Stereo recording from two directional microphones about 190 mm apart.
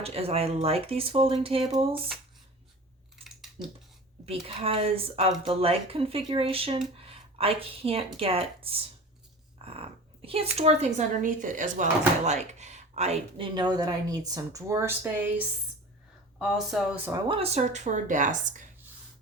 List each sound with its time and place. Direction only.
0.0 s speech: 30° right (ahead or behind)
4.3 s speech: 30° right (ahead or behind); by 15.3 s 10° right (ahead or behind)
16.4 s speech: 5° right (ahead or behind)
17.1 s speech: 25° right (ahead or behind); by 18.7 s 40° right (ahead or behind)